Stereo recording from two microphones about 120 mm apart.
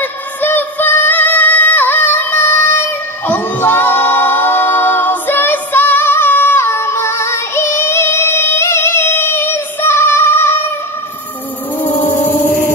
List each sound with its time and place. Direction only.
0.0 s music: 15° left (ahead or behind)